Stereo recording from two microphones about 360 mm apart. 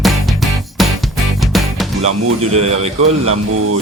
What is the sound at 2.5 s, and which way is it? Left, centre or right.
Speech, centre.